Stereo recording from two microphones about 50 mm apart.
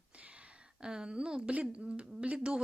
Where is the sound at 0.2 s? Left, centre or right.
Right.